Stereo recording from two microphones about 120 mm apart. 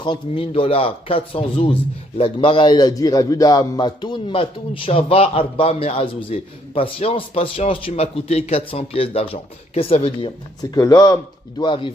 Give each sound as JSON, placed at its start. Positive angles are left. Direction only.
{"t": 0.0, "sound": "speech", "side_deg": 40}
{"t": 0.5, "sound": "a man's voice", "side_deg": 50}
{"t": 10.6, "sound": "speech", "side_deg": 30}